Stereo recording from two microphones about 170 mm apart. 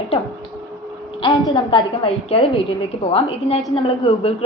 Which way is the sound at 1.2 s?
25° left (ahead or behind).